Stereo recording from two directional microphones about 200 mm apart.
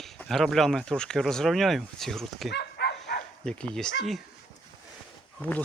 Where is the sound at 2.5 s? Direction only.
55° left (ahead or behind).